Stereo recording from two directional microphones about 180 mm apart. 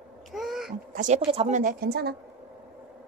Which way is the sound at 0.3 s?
Centre (ahead or behind).